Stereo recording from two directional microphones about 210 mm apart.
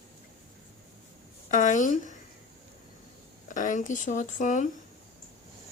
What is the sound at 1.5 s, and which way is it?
Speech, 35° left (ahead or behind).